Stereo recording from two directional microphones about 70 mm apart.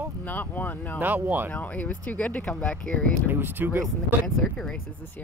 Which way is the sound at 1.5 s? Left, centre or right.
Left.